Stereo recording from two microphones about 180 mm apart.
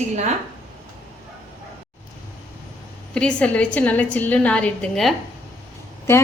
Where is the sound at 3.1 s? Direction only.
5° left (ahead or behind).